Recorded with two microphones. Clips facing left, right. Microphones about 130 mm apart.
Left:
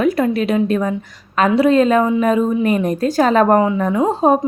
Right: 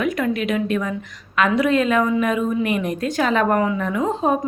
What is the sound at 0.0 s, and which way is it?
A woman's voice, 35° left (ahead or behind).